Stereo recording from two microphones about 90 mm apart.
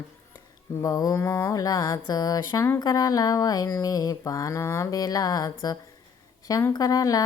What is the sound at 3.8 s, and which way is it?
Mantra, 40° left (ahead or behind).